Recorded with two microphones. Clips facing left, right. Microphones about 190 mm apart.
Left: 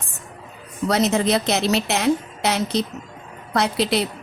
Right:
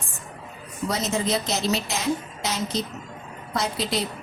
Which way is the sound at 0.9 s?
70° left (ahead or behind).